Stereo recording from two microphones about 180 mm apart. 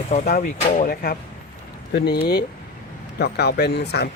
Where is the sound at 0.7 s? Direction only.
55° left (ahead or behind).